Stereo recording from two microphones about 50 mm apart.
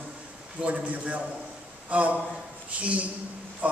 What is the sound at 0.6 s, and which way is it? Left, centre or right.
A man's voice, right.